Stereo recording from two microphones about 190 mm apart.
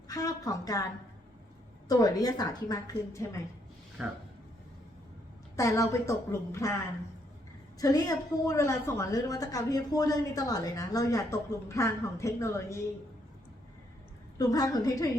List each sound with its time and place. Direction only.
0.1 s a woman's voice: 20° left (ahead or behind)
1.9 s a woman's voice: 20° left (ahead or behind)
4.0 s speech: 5° right (ahead or behind)
5.5 s a woman's voice: 15° left (ahead or behind)
7.8 s a woman's voice: 20° left (ahead or behind)
14.3 s a woman's voice: 20° left (ahead or behind)